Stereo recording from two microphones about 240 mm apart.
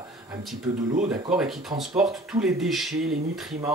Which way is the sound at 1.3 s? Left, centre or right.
Centre.